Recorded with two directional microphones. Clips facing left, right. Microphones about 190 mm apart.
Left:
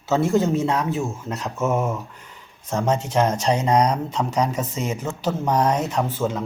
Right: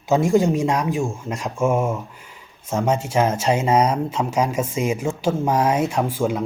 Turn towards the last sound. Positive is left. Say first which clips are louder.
# right 2 dB
turn(degrees=-10)  # may be behind; listen again after turning